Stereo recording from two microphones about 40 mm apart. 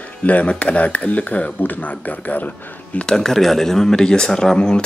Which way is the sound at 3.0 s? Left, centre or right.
Centre.